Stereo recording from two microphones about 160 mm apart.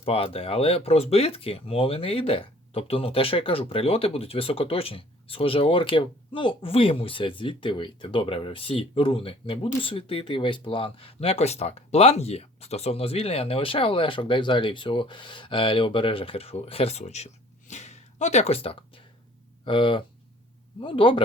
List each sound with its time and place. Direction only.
0.0 s speech: 35° left (ahead or behind)